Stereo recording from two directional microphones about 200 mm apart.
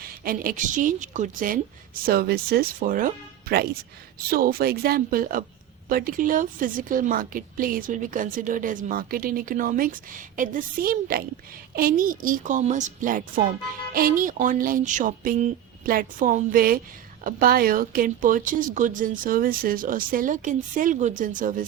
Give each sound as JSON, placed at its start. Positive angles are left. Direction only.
{"t": 0.0, "sound": "speech", "side_deg": -45}
{"t": 2.0, "sound": "a woman's voice", "side_deg": -50}
{"t": 4.3, "sound": "a woman's voice", "side_deg": -50}